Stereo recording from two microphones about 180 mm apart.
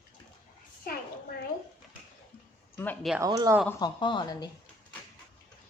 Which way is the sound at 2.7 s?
10° left (ahead or behind).